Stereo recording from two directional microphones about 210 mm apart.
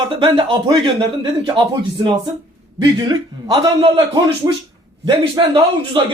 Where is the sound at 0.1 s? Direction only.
25° right (ahead or behind).